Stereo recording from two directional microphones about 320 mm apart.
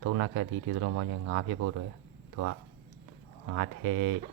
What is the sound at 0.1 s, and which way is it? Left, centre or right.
Speech, right.